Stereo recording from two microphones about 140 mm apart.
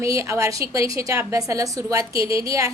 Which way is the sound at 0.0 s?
20° right (ahead or behind).